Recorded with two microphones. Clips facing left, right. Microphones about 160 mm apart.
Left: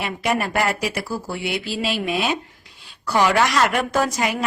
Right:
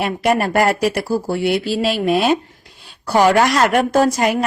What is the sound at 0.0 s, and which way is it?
A woman's voice, 50° right (ahead or behind).